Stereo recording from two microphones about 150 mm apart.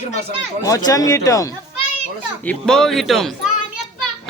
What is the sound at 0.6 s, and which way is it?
Speech, 25° left (ahead or behind).